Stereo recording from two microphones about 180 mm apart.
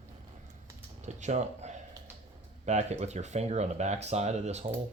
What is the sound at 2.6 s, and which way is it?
Speech, 40° right (ahead or behind).